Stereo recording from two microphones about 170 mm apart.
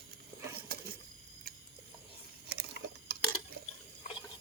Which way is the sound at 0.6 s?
65° right (ahead or behind).